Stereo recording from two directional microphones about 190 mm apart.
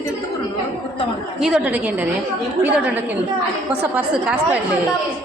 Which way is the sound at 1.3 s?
5° right (ahead or behind).